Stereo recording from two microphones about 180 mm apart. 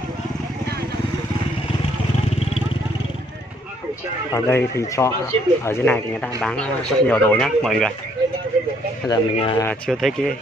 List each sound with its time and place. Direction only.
4.3 s speech: 15° left (ahead or behind)
9.1 s speech: 30° left (ahead or behind)
9.8 s speech: centre (ahead or behind)